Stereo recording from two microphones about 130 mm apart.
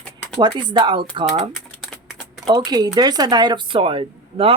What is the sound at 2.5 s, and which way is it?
Speech, 30° right (ahead or behind).